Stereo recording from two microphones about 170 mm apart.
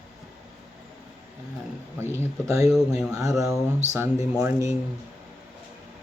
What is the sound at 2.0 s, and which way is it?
Speech, 15° right (ahead or behind).